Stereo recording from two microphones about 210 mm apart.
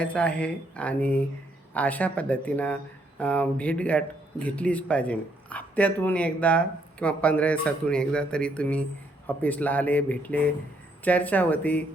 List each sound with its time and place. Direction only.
0.0 s speech: 5° left (ahead or behind)